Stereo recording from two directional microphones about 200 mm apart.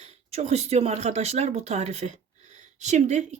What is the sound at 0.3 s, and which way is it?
A woman's voice, 35° right (ahead or behind).